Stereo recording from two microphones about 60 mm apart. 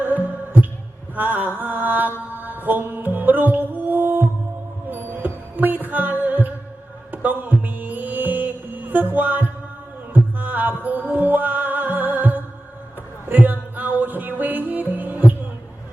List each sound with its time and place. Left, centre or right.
1.1 s mantra: right
2.3 s music: right
7.1 s mantra: right
9.1 s music: right